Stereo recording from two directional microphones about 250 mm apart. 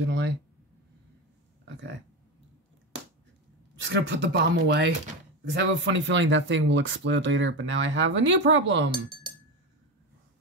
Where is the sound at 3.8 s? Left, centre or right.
Right.